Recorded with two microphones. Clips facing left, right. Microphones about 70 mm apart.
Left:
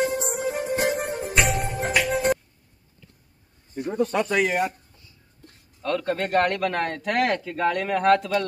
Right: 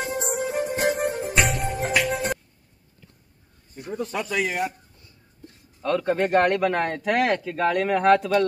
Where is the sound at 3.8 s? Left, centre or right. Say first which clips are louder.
Left 6 dB; left.